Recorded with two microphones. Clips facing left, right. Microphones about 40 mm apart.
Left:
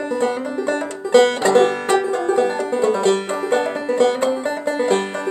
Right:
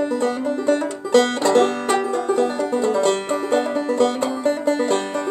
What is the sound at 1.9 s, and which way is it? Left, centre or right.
Music, left.